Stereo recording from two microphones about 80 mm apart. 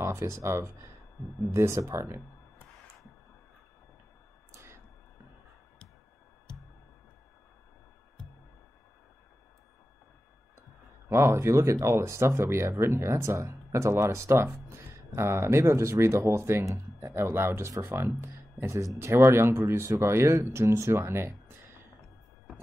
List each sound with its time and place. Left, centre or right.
0.0 s speech: right
4.5 s a sound: right
11.1 s speech: right